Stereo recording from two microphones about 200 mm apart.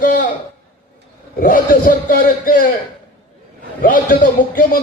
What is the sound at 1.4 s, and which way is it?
A man's voice, 45° left (ahead or behind).